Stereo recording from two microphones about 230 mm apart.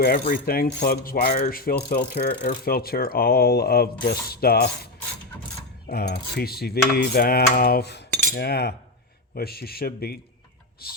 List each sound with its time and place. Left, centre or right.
0.0 s mechanisms: left
5.9 s mechanisms: left